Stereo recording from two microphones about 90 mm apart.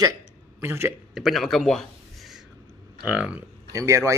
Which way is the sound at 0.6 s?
25° right (ahead or behind).